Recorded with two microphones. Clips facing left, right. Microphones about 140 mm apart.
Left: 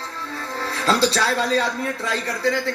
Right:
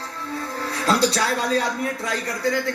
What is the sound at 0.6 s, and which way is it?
Music, 30° left (ahead or behind).